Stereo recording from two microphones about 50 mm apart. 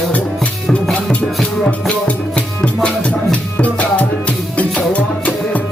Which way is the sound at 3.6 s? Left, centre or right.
Left.